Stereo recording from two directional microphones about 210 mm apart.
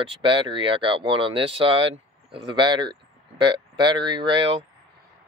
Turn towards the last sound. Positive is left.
turn(degrees=-25)  # may be behind; listen again after turning